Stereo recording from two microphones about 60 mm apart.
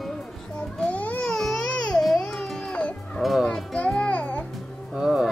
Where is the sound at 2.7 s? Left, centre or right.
Centre.